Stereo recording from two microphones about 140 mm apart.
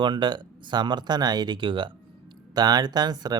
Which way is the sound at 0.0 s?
35° right (ahead or behind).